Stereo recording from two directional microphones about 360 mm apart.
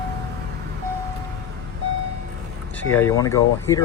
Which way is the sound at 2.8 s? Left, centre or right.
Centre.